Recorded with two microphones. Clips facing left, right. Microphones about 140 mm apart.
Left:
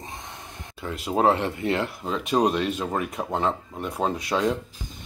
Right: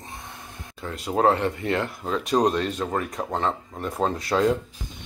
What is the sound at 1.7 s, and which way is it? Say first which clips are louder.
Speech: right 1 dB; 5° left (ahead or behind).